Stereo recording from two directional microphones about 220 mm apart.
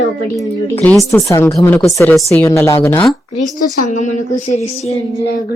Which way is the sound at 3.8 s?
35° left (ahead or behind).